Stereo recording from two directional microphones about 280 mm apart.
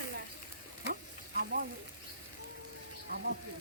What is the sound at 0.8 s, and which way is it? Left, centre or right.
Stir, right.